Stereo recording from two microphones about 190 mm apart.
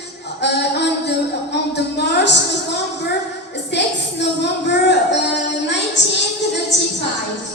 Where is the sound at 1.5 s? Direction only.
65° left (ahead or behind).